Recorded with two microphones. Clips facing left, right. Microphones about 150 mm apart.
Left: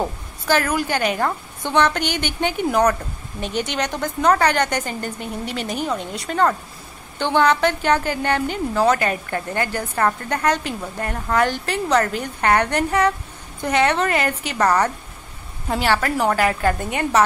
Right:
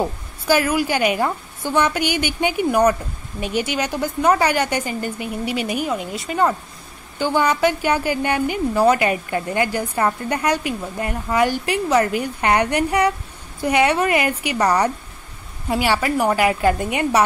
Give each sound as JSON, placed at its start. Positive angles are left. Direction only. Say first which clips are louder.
{"t": 0.5, "sound": "a woman's voice", "louder": "right 2 dB", "side_deg": -10}